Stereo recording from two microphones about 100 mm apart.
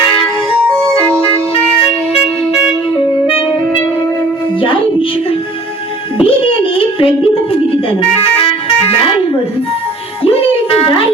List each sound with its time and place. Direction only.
2.5 s music: 10° right (ahead or behind)
6.1 s music: 65° left (ahead or behind)